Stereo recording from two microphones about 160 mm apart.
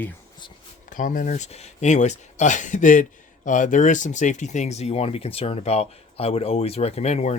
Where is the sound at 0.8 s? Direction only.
55° left (ahead or behind).